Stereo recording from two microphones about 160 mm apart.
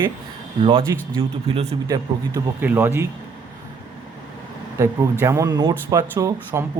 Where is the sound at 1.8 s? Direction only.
20° right (ahead or behind).